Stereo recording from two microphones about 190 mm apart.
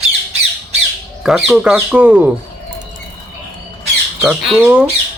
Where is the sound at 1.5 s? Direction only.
5° right (ahead or behind).